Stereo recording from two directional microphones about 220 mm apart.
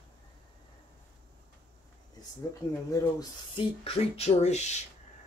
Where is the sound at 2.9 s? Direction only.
20° left (ahead or behind).